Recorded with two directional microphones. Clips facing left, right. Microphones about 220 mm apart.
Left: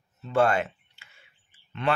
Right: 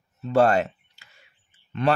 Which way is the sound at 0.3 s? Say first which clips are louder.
Right 4 dB; 40° right (ahead or behind).